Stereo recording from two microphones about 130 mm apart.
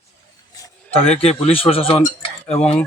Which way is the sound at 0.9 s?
50° left (ahead or behind).